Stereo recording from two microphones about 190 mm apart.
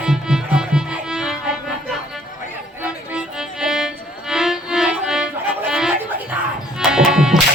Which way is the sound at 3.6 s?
Centre (ahead or behind).